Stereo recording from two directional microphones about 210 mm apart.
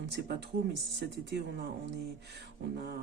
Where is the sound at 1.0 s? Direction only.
50° right (ahead or behind).